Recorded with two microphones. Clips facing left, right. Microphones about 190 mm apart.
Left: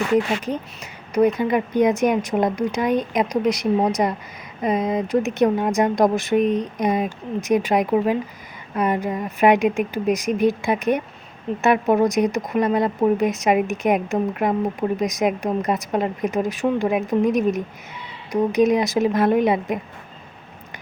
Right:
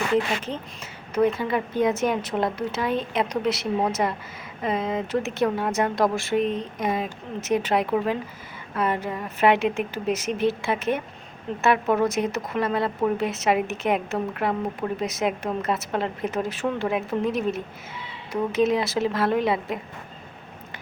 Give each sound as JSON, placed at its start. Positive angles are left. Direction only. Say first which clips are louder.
{"t": 1.1, "sound": "speech", "louder": "left 4 dB", "side_deg": 15}